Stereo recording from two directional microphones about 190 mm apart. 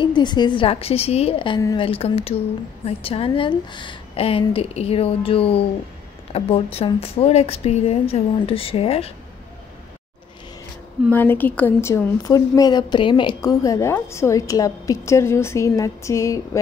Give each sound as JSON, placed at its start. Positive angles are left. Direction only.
{"t": 0.0, "sound": "a woman's voice", "side_deg": 25}
{"t": 1.6, "sound": "a woman's voice", "side_deg": 20}
{"t": 1.9, "sound": "a woman's voice", "side_deg": 30}
{"t": 11.1, "sound": "a woman's voice", "side_deg": 10}